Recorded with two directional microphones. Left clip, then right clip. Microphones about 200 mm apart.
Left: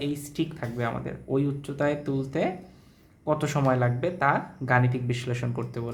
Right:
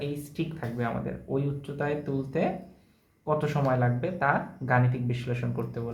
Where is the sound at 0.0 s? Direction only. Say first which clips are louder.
Left 3 dB; 35° left (ahead or behind).